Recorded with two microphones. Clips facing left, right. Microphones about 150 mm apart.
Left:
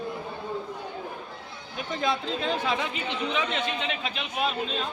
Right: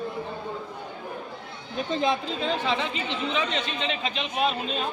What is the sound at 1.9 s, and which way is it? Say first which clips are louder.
Speech: right 3 dB; 20° right (ahead or behind).